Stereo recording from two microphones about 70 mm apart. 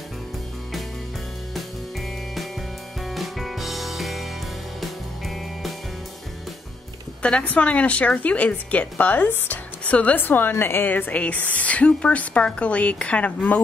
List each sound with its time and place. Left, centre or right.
3.1 s music: centre
7.2 s speech: centre